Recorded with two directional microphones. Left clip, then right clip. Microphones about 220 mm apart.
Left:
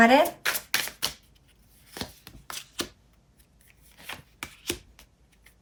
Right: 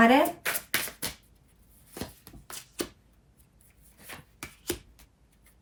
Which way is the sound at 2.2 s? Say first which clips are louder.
Left 5 dB; centre (ahead or behind).